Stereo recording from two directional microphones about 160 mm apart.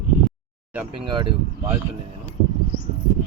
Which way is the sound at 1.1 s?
30° right (ahead or behind).